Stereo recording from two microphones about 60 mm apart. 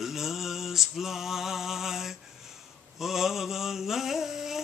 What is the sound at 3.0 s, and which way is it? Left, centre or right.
Mantra, centre.